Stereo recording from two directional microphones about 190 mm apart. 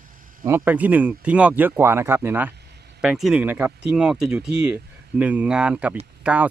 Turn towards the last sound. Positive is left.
turn(degrees=-5)  # may be behind; listen again after turning